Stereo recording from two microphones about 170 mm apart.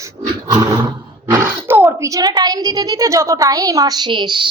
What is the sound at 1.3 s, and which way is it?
Speech, 10° right (ahead or behind).